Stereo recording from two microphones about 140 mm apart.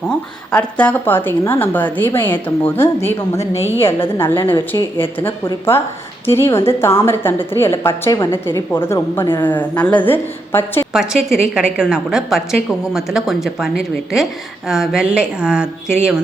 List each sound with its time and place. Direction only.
0.1 s a woman's voice: 10° left (ahead or behind)
10.9 s a woman's voice: 5° right (ahead or behind)
14.7 s a woman's voice: 5° right (ahead or behind)